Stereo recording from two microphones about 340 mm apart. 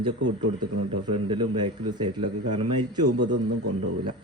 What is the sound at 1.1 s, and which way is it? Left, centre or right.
Speech, centre.